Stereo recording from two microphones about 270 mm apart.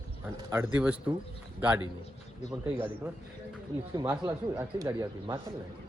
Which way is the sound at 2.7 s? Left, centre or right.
Centre.